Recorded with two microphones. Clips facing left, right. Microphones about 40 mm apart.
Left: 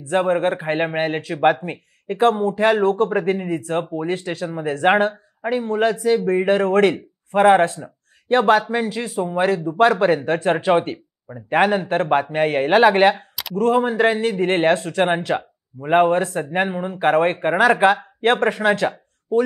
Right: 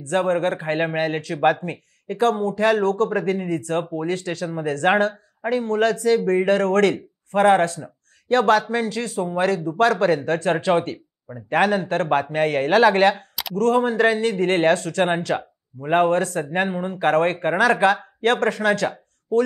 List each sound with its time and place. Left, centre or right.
0.1 s speech: centre